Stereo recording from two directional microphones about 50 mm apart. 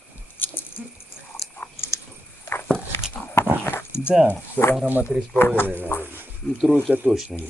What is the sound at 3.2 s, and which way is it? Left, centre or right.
Biting, left.